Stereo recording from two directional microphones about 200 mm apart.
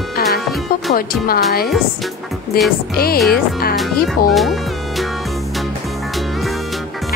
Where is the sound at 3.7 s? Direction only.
Centre (ahead or behind).